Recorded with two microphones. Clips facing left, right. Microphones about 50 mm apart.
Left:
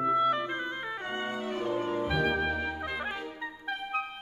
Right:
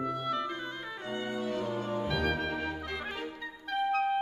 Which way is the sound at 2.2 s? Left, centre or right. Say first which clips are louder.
Left 3 dB; centre.